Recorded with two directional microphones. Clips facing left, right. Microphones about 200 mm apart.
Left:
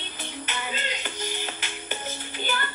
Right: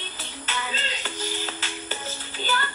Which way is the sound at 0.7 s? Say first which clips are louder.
Left 1 dB; 15° left (ahead or behind).